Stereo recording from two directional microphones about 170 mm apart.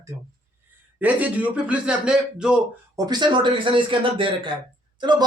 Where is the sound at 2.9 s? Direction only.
25° right (ahead or behind).